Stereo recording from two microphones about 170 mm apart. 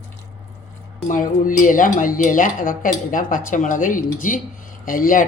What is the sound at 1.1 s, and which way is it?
Speech, 50° left (ahead or behind).